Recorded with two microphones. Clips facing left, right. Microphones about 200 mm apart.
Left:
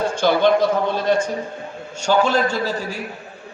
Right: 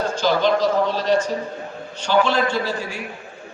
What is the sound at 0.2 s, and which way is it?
Speech, 55° left (ahead or behind).